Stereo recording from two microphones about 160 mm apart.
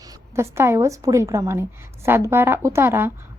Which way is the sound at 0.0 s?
20° right (ahead or behind).